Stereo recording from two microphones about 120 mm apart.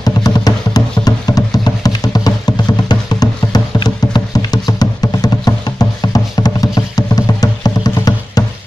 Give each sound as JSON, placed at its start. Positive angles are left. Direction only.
{"t": 0.0, "sound": "music", "side_deg": 35}